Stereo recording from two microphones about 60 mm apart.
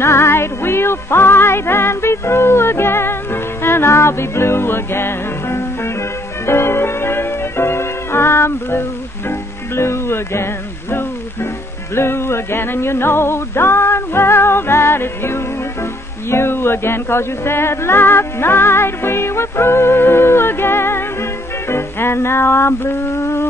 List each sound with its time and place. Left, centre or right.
0.0 s music: left